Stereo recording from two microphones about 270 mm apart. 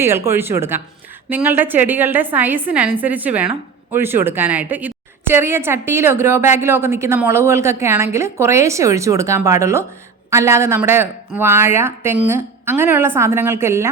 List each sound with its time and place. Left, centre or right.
0.0 s a woman's voice: centre